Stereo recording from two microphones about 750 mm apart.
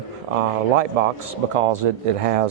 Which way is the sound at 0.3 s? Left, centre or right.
Right.